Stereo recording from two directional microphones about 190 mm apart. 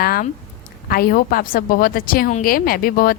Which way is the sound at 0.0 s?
50° left (ahead or behind).